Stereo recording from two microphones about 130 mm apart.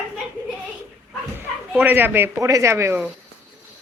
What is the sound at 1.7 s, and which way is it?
Speech, 10° right (ahead or behind).